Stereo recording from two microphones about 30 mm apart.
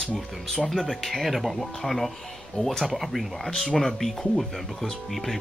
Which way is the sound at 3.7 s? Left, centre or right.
Centre.